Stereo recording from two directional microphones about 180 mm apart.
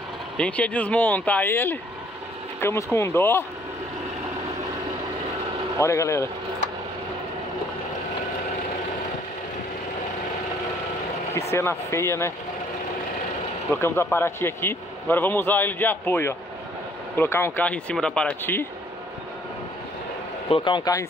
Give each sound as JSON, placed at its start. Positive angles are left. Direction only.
{"t": 0.4, "sound": "a man's voice", "side_deg": 5}
{"t": 5.8, "sound": "a man's voice", "side_deg": 15}
{"t": 11.5, "sound": "a man's voice", "side_deg": 15}
{"t": 13.7, "sound": "a man's voice", "side_deg": 15}
{"t": 20.4, "sound": "speech", "side_deg": 30}